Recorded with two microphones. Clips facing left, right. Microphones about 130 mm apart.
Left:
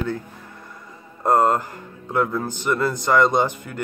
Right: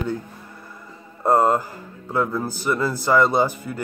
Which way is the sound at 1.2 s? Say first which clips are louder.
Even; 10° right (ahead or behind).